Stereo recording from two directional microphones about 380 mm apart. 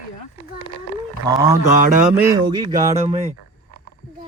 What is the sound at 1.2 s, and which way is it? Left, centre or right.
Speech, centre.